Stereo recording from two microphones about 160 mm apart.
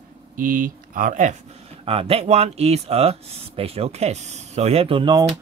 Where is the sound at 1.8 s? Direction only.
40° right (ahead or behind).